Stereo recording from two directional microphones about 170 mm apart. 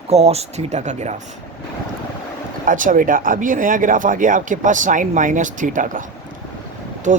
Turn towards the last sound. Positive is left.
turn(degrees=-45)  # may be behind; listen again after turning